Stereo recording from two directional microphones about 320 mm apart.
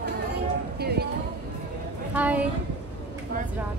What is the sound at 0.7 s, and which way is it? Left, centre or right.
Music, right.